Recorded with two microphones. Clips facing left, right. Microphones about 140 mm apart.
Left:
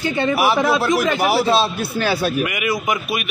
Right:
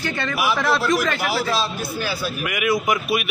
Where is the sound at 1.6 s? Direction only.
65° left (ahead or behind).